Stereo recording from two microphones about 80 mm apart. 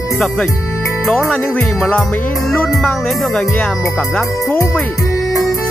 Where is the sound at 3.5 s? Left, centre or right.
Left.